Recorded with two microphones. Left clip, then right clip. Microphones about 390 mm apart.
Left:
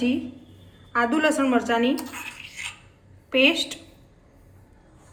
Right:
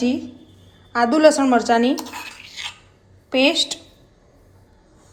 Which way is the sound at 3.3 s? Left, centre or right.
Centre.